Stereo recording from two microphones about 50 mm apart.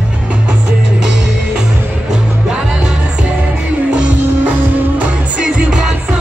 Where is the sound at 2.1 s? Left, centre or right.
Centre.